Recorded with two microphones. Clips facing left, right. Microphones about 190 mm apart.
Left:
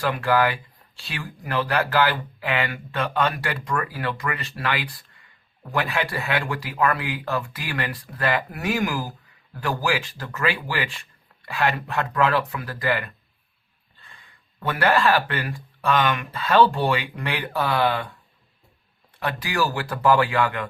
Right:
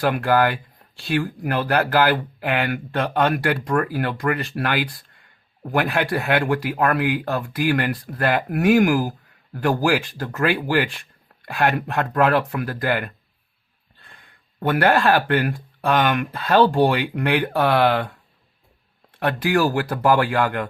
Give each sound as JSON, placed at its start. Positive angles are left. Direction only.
{"t": 0.0, "sound": "speech", "side_deg": -55}
{"t": 19.2, "sound": "speech", "side_deg": -55}